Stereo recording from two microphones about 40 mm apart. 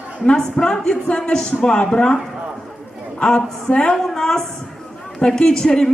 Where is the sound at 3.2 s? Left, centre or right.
Left.